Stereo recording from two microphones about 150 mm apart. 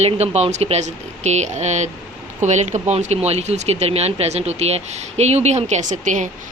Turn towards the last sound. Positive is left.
turn(degrees=-55)  # may be behind; listen again after turning